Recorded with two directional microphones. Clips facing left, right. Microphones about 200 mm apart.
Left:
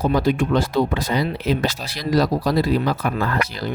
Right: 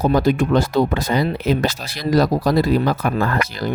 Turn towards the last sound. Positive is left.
turn(degrees=-45)  # may be behind; listen again after turning